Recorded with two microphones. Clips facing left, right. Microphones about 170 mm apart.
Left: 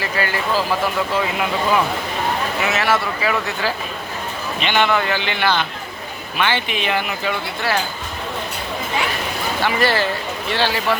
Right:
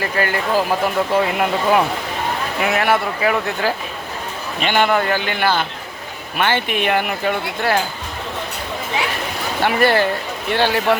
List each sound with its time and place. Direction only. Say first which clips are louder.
0.0 s speech: right 2 dB; 50° right (ahead or behind)
9.6 s speech: right 4 dB; 55° right (ahead or behind)